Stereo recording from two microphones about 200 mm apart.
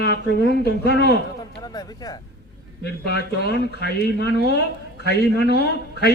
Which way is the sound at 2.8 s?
50° left (ahead or behind).